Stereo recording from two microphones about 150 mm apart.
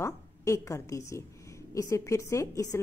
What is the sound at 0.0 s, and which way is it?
A woman's voice, 20° left (ahead or behind).